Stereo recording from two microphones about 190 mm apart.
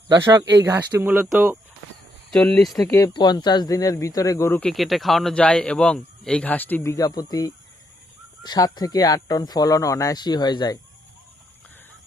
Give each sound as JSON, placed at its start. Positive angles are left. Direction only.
{"t": 0.1, "sound": "speech", "side_deg": -20}
{"t": 2.3, "sound": "a man's voice", "side_deg": 5}
{"t": 2.9, "sound": "speech", "side_deg": 20}
{"t": 4.7, "sound": "a man's voice", "side_deg": 0}